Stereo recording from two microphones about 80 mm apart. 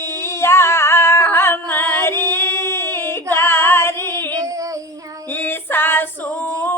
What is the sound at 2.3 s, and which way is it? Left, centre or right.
Singing, left.